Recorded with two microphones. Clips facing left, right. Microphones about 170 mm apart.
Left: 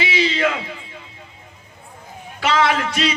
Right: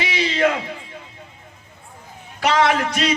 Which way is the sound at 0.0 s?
50° right (ahead or behind).